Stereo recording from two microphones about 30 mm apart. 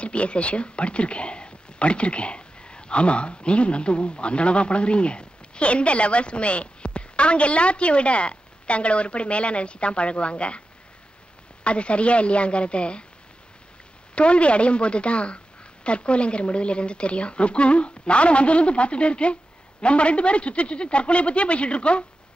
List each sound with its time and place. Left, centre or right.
0.0 s speech: left
11.6 s a woman's voice: left
14.1 s a woman's voice: left